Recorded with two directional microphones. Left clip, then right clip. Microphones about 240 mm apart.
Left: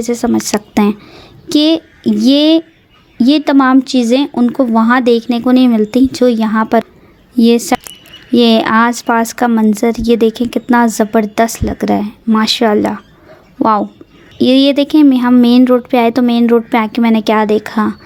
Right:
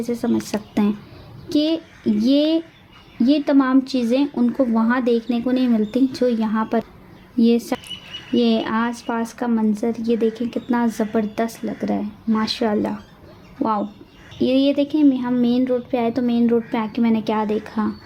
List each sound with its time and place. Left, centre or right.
0.0 s a woman's voice: left